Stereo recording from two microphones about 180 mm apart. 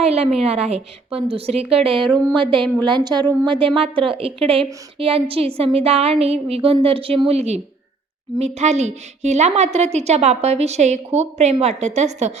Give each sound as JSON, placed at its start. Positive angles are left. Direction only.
{"t": 0.0, "sound": "a woman's voice", "side_deg": -35}